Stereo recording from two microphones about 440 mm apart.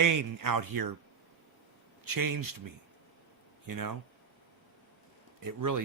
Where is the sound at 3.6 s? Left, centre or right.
Right.